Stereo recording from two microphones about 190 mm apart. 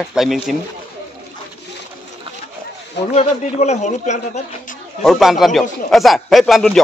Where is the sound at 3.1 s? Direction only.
35° left (ahead or behind).